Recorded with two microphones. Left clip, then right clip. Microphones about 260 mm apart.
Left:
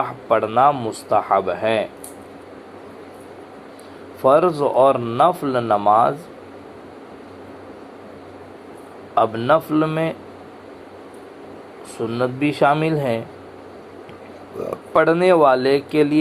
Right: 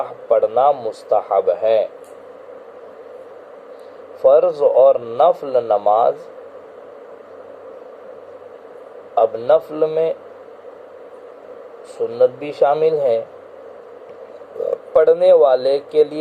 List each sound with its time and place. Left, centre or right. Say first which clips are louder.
0.0 s speech: right 3 dB; left
4.2 s a man's voice: right 3 dB; left
9.1 s a man's voice: right 2 dB; left
12.0 s speech: right 5 dB; left
14.6 s a man's voice: right 3 dB; left